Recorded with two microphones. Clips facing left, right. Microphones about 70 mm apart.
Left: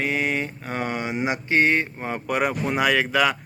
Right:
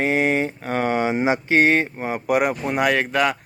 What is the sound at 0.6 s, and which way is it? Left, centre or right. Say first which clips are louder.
Speech: right 6 dB; right.